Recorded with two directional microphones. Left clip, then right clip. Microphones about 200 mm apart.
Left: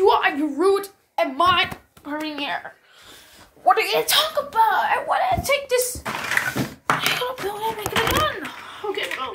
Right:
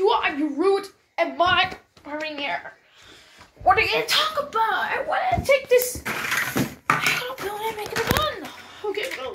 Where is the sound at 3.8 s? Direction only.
15° left (ahead or behind).